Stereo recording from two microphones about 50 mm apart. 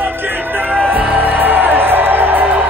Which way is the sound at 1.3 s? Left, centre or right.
Right.